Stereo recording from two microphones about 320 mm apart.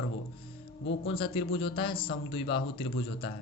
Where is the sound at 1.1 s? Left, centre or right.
Centre.